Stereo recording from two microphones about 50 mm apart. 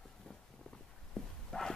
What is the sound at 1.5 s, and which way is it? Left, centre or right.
Bow-wow, centre.